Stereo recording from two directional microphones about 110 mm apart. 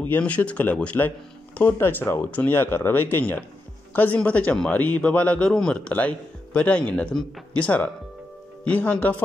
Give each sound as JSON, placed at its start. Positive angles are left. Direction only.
{"t": 0.0, "sound": "a man's voice", "side_deg": 15}